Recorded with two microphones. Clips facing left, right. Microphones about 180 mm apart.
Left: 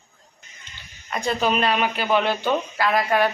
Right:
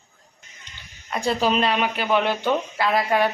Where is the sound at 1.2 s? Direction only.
30° right (ahead or behind).